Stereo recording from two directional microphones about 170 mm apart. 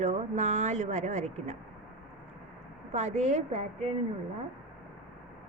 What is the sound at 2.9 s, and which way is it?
Speech, 40° right (ahead or behind).